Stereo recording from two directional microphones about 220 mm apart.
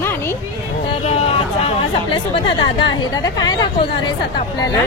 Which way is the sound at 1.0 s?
30° left (ahead or behind).